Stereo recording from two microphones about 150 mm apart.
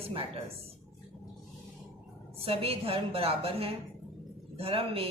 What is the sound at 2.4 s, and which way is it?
A woman's voice, 40° right (ahead or behind).